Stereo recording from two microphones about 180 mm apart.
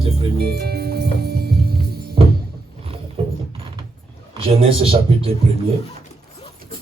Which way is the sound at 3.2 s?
35° right (ahead or behind).